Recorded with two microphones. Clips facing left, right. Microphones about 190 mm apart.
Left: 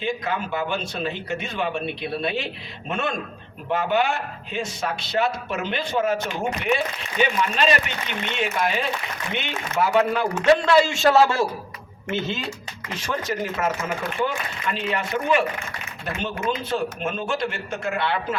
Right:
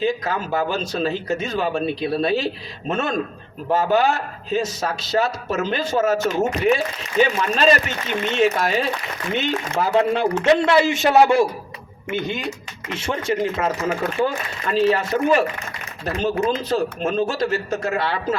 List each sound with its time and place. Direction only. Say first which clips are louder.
0.0 s a man's voice: right 4 dB; 40° right (ahead or behind); by 12.5 s 15° right (ahead or behind)
13.0 s a man's voice: right 5 dB; 25° right (ahead or behind)